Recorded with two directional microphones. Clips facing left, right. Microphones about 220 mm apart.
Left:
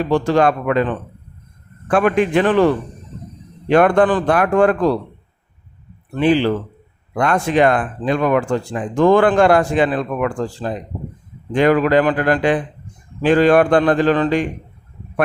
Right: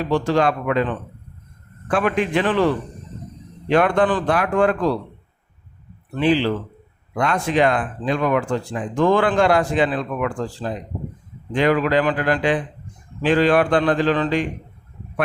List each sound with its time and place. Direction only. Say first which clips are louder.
0.1 s speech: left 3 dB; 50° left (ahead or behind)
1.9 s speech: left 5 dB; 50° left (ahead or behind)
3.7 s speech: left 4 dB; 50° left (ahead or behind)
6.1 s speech: left 3 dB; 50° left (ahead or behind)